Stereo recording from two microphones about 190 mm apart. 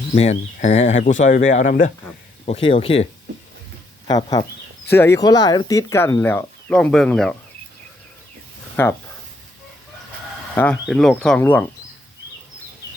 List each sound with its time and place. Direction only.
0.1 s speech: 35° left (ahead or behind)
2.5 s speech: 30° left (ahead or behind)
4.9 s speech: 15° left (ahead or behind)
8.7 s speech: 10° left (ahead or behind)
10.5 s speech: 10° left (ahead or behind)